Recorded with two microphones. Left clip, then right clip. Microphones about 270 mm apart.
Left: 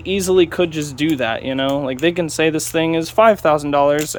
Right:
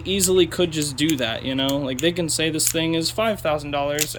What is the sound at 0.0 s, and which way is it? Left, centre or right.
Speech, centre.